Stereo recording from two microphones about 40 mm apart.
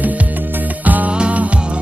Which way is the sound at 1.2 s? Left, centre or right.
Right.